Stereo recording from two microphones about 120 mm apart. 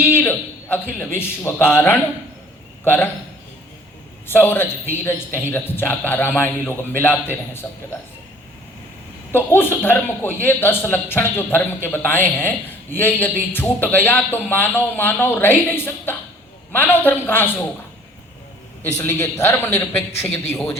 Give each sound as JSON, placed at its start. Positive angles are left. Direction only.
{"t": 0.0, "sound": "a man's voice", "side_deg": 15}
{"t": 4.3, "sound": "a man's voice", "side_deg": 15}
{"t": 9.3, "sound": "a man's voice", "side_deg": 15}
{"t": 18.8, "sound": "a man's voice", "side_deg": 20}